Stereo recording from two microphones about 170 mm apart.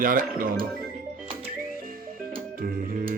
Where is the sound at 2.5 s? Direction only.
60° right (ahead or behind).